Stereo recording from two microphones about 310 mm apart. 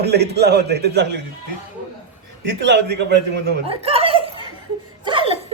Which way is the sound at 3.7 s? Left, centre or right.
Centre.